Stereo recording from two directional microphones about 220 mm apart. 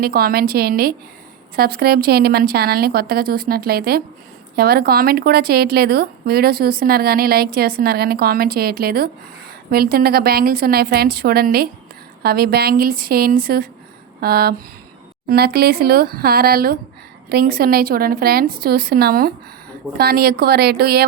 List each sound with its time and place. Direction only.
0.0 s a woman's voice: 45° right (ahead or behind)